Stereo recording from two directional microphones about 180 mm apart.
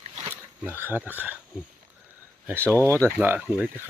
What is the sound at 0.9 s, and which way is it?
Speech, 10° right (ahead or behind).